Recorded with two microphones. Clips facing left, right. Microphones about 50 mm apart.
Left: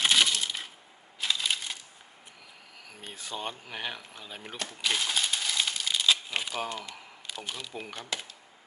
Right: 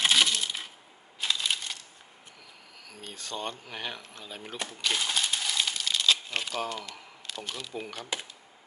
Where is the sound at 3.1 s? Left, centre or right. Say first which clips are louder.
Right 1 dB; centre.